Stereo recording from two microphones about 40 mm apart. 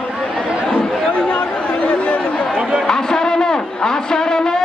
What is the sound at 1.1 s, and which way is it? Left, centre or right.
Chatter, left.